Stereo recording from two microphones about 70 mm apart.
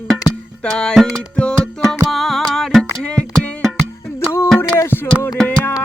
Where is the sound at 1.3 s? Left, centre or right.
Centre.